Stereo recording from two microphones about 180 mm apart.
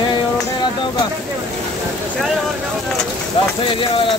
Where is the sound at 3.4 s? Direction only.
30° left (ahead or behind).